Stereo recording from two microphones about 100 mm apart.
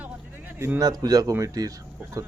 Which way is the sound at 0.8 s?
40° right (ahead or behind).